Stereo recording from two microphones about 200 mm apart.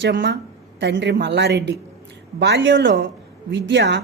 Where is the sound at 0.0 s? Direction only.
60° right (ahead or behind).